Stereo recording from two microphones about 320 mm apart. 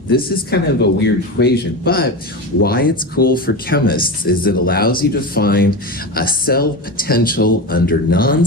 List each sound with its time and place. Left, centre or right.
0.1 s speech: left